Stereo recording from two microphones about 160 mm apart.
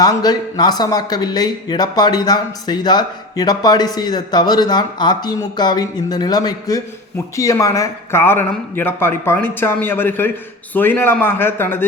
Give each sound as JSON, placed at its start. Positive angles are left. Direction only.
{"t": 0.0, "sound": "speech", "side_deg": 25}